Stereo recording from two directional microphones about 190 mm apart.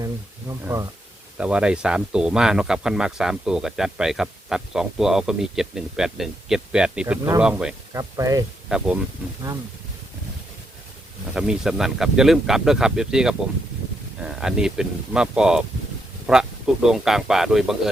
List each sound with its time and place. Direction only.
0.0 s speech: 15° right (ahead or behind)
1.4 s speech: 5° right (ahead or behind)
7.9 s speech: 15° right (ahead or behind)
8.7 s speech: 5° right (ahead or behind)
11.3 s speech: 5° right (ahead or behind)